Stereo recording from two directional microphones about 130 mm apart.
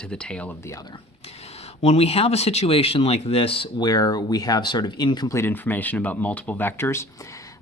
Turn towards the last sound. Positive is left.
turn(degrees=20)  # may be behind; listen again after turning